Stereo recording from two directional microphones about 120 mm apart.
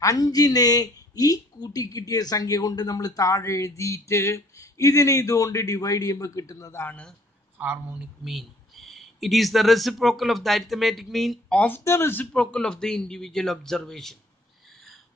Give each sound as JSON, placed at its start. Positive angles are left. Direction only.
{"t": 0.0, "sound": "speech", "side_deg": 30}
{"t": 6.8, "sound": "speech", "side_deg": 10}
{"t": 7.5, "sound": "speech", "side_deg": -15}
{"t": 8.2, "sound": "speech", "side_deg": 0}
{"t": 11.6, "sound": "speech", "side_deg": 20}